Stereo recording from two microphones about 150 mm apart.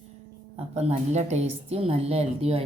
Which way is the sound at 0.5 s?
45° right (ahead or behind).